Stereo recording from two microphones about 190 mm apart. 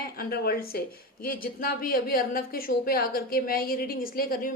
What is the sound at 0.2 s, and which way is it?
A woman's voice, 55° left (ahead or behind).